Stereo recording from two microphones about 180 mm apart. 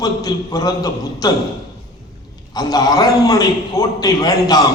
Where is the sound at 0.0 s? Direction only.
20° left (ahead or behind).